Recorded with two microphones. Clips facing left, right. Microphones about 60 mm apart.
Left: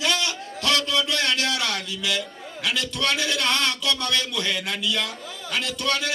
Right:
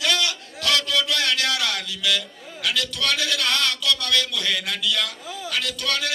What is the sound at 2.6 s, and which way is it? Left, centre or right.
A man's voice, left.